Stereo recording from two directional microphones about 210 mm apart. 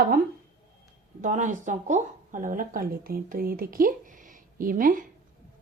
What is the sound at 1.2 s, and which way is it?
Speech, 35° right (ahead or behind).